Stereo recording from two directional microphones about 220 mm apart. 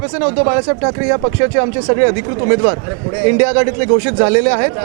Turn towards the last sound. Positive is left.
turn(degrees=-20)  # may be behind; listen again after turning